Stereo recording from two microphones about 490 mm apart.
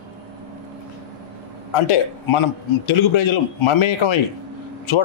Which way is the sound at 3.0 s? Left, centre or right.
Left.